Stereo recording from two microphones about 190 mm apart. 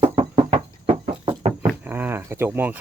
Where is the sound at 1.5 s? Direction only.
10° right (ahead or behind).